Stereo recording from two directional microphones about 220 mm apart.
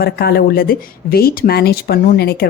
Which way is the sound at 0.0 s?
45° left (ahead or behind).